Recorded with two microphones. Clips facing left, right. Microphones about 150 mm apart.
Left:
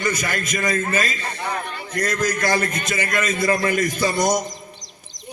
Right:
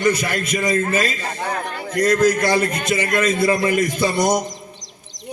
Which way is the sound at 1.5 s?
75° right (ahead or behind).